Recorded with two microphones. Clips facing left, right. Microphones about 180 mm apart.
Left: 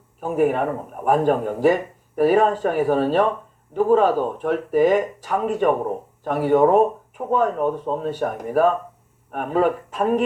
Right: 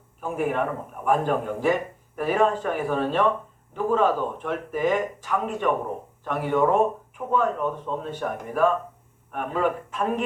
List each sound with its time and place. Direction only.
0.2 s speech: 40° left (ahead or behind)